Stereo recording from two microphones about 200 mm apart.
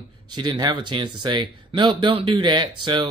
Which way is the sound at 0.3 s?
20° right (ahead or behind).